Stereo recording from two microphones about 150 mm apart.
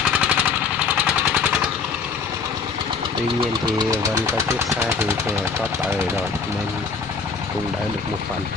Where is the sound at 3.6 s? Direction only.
25° right (ahead or behind).